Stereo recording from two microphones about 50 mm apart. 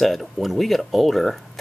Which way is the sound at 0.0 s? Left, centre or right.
Centre.